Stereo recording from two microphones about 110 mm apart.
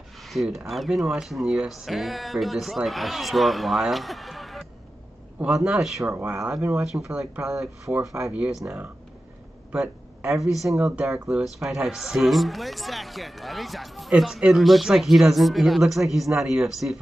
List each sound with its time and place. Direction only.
0.2 s speech: centre (ahead or behind)
6.0 s speech: 20° right (ahead or behind)
6.7 s speech: 5° right (ahead or behind)
9.7 s a sound: 5° right (ahead or behind)
10.6 s speech: centre (ahead or behind)